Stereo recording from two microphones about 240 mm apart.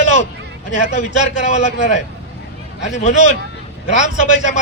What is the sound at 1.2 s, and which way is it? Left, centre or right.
Speech, left.